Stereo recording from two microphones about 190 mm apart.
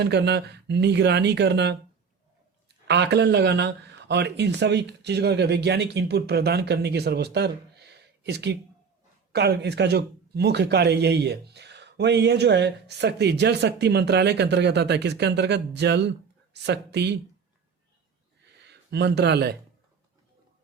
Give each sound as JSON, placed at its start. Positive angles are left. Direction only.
{"t": 0.0, "sound": "speech", "side_deg": -60}
{"t": 18.6, "sound": "speech", "side_deg": -65}